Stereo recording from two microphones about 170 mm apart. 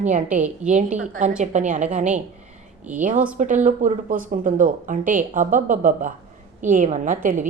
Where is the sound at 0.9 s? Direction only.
50° right (ahead or behind).